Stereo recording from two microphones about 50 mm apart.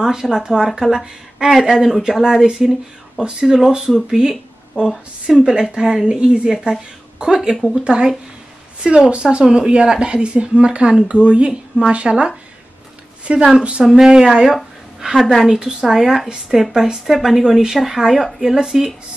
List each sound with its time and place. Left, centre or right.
0.0 s speech: centre
13.6 s speech: right
13.8 s speech: centre